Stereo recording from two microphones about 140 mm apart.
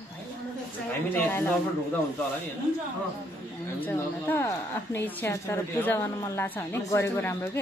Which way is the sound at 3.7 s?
15° left (ahead or behind).